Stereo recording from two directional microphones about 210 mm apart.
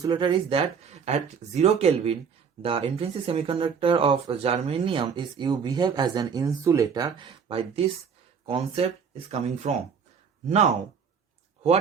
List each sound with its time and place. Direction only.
0.0 s speech: 20° right (ahead or behind)